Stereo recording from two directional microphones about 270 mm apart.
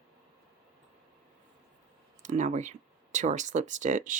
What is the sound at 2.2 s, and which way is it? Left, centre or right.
Speech, right.